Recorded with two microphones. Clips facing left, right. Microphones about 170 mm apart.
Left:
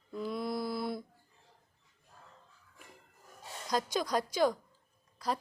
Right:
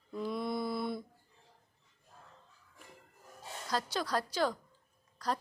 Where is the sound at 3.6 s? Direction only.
15° left (ahead or behind).